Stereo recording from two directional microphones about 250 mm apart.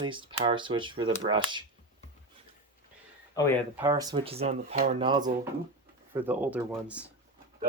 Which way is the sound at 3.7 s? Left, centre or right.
Centre.